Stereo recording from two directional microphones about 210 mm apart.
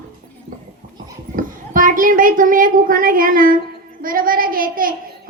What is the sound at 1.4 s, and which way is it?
A woman's voice, 40° right (ahead or behind).